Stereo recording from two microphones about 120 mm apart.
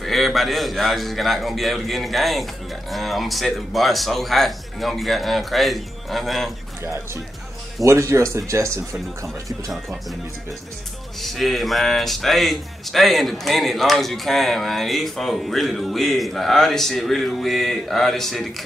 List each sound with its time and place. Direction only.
0.0 s speech: centre (ahead or behind)
7.8 s speech: 25° right (ahead or behind)
11.1 s speech: centre (ahead or behind)